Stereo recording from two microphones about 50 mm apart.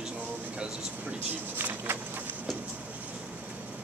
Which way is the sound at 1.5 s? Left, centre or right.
Right.